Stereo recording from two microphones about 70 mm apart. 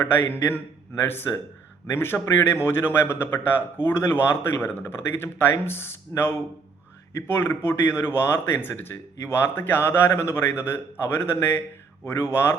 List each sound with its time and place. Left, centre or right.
0.0 s a man's voice: left